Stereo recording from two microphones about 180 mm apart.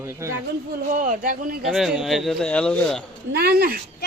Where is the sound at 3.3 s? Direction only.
60° right (ahead or behind).